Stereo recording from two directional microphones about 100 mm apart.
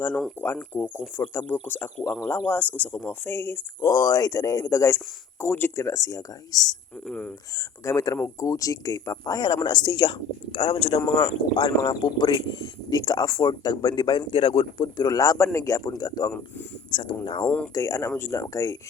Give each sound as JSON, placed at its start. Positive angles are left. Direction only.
{"t": 0.4, "sound": "speech", "side_deg": 20}
{"t": 7.1, "sound": "speech", "side_deg": 15}
{"t": 7.5, "sound": "speech", "side_deg": 35}
{"t": 16.9, "sound": "speech", "side_deg": 50}
{"t": 17.7, "sound": "speech", "side_deg": 35}